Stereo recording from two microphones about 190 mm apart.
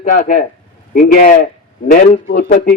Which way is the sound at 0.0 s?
45° left (ahead or behind).